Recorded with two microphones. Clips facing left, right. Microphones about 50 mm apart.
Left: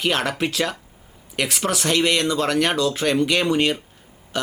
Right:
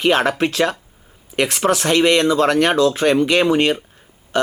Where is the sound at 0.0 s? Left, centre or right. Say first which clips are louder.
Right 6 dB; centre.